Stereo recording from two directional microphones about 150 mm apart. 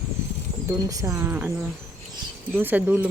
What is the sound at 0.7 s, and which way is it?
Speech, 20° right (ahead or behind).